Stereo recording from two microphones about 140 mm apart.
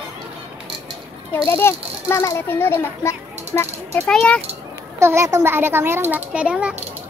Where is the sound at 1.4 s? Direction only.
15° left (ahead or behind).